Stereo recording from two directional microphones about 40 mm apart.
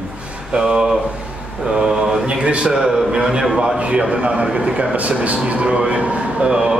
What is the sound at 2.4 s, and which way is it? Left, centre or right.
Speech, right.